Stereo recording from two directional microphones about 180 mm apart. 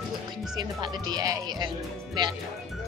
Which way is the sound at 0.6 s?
25° right (ahead or behind).